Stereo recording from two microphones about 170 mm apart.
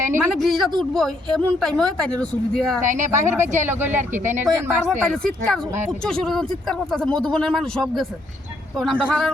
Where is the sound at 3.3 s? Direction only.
15° right (ahead or behind).